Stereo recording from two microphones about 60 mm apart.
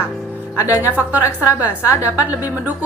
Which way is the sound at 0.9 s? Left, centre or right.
Right.